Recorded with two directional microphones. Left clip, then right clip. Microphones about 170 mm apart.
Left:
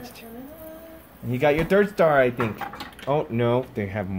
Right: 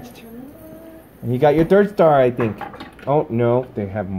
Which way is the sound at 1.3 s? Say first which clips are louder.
Right 6 dB; 20° right (ahead or behind).